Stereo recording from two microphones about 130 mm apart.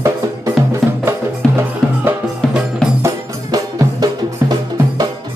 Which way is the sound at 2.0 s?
10° right (ahead or behind).